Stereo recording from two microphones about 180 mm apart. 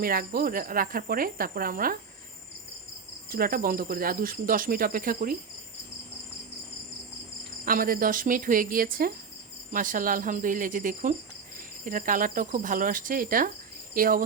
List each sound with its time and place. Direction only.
0.0 s speech: 55° right (ahead or behind)
3.2 s speech: 55° right (ahead or behind)
7.6 s speech: 50° right (ahead or behind)